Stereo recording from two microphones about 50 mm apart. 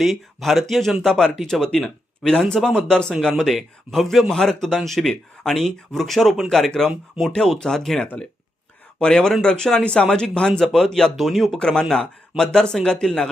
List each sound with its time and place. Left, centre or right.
0.0 s speech: centre
9.8 s speech: left
10.1 s speech: centre
11.6 s speech: centre